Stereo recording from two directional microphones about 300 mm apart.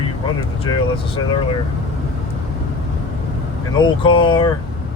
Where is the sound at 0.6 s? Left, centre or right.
Centre.